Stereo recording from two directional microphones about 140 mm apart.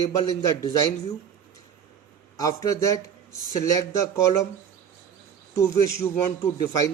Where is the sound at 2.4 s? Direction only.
25° left (ahead or behind).